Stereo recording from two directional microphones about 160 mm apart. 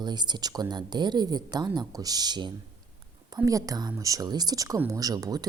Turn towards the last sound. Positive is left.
turn(degrees=-25)  # may be behind; listen again after turning